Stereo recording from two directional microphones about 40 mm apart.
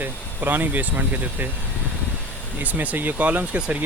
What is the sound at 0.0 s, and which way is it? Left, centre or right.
Speech, right.